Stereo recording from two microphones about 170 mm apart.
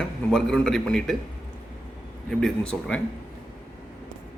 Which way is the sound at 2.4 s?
5° left (ahead or behind).